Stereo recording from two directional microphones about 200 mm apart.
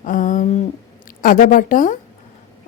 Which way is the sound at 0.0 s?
40° left (ahead or behind).